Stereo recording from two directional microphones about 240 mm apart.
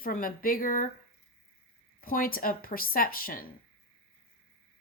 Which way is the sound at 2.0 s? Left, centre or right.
Left.